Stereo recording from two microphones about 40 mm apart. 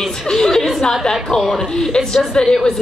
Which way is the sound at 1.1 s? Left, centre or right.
Centre.